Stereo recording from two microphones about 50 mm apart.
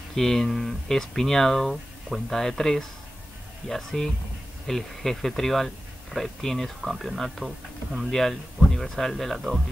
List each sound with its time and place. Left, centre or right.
0.1 s speech: centre